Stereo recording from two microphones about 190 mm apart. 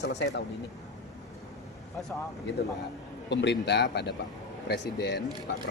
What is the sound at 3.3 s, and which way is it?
Speech, 65° left (ahead or behind).